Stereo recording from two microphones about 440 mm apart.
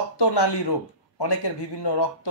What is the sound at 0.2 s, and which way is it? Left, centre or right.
A man's voice, left.